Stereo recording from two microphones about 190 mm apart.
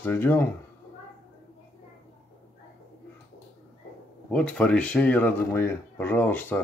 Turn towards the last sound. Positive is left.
turn(degrees=10)  # may be behind; listen again after turning